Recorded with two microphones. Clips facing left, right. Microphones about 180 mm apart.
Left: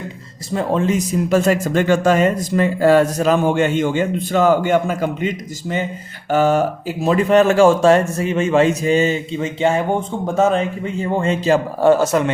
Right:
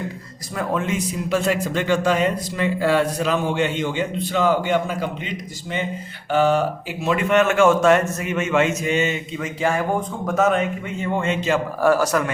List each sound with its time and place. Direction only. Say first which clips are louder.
0.5 s speech: left 6 dB; 30° left (ahead or behind)
11.9 s speech: left 5 dB; 25° left (ahead or behind)